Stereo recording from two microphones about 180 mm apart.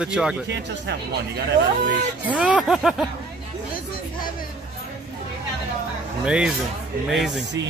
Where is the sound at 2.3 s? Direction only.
5° right (ahead or behind).